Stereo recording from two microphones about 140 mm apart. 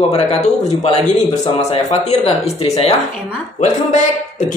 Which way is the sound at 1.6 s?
50° left (ahead or behind).